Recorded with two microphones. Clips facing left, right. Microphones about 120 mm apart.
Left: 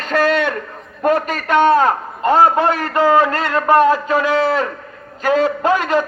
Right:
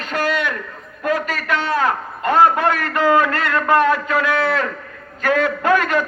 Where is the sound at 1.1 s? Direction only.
50° left (ahead or behind).